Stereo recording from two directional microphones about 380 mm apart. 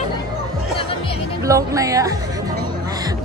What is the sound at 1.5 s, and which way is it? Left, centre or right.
Speech, centre.